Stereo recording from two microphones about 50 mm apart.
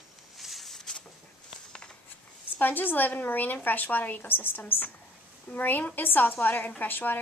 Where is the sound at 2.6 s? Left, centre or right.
Left.